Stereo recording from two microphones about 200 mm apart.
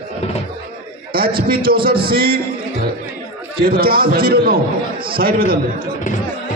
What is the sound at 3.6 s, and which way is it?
A man's voice, 50° right (ahead or behind).